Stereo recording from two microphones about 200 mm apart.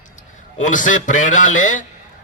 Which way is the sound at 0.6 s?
40° left (ahead or behind).